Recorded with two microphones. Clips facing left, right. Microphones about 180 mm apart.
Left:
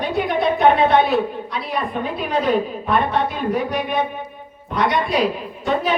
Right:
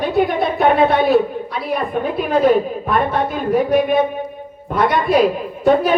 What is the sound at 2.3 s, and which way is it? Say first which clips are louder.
A woman's voice: right 6 dB; 45° right (ahead or behind).